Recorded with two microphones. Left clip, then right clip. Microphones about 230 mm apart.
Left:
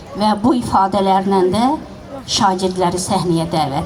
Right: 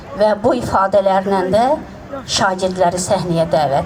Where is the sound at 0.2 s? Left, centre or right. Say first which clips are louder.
Right 2 dB; right.